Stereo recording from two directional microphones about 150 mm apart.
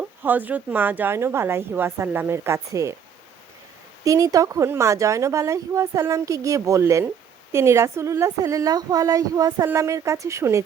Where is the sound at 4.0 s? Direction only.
20° right (ahead or behind).